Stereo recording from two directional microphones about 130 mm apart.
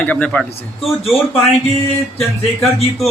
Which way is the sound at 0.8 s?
Centre (ahead or behind).